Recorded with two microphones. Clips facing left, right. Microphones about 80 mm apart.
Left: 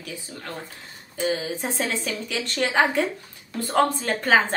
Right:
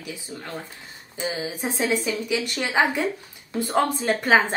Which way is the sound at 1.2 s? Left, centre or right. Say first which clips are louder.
Left 3 dB; centre.